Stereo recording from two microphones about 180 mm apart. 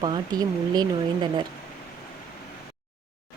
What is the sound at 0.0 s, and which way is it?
Speech, 25° right (ahead or behind).